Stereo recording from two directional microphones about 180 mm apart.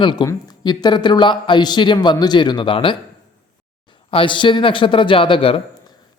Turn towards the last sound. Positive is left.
turn(degrees=30)  # may be behind; listen again after turning